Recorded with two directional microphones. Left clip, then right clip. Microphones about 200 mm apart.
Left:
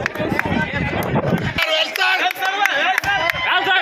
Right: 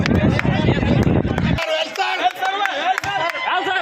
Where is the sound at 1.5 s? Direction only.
40° right (ahead or behind).